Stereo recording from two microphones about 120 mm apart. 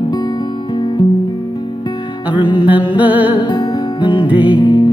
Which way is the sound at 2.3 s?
40° left (ahead or behind).